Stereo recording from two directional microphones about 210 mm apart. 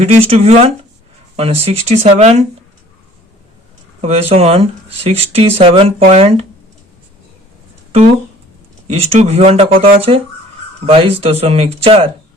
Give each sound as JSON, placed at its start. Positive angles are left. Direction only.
{"t": 0.0, "sound": "speech", "side_deg": -30}
{"t": 4.0, "sound": "speech", "side_deg": -30}
{"t": 8.9, "sound": "speech", "side_deg": -30}